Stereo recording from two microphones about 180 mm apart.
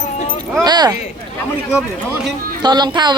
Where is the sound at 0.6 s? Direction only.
20° right (ahead or behind).